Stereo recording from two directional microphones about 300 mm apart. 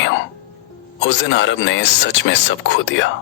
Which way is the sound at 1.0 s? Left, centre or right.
Left.